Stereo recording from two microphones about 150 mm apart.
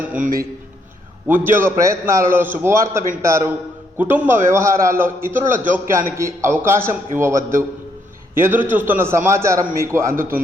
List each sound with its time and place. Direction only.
1.3 s a man's voice: 15° right (ahead or behind)